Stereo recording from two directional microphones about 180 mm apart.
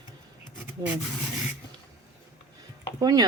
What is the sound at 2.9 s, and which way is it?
Speech, 20° right (ahead or behind).